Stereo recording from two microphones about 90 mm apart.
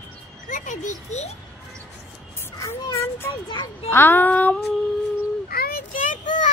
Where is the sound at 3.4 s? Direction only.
60° left (ahead or behind).